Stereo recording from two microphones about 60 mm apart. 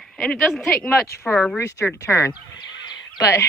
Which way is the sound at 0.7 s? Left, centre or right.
Left.